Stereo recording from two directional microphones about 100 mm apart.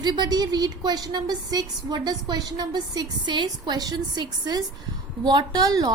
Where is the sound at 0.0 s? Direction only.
45° right (ahead or behind).